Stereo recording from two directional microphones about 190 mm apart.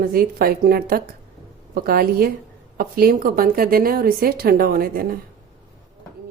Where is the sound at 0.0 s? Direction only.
50° right (ahead or behind).